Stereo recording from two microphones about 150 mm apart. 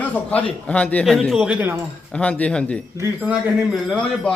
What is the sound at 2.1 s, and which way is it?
Speech, 5° left (ahead or behind).